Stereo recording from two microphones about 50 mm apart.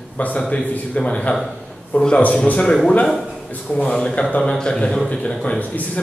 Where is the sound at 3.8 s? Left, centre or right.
Centre.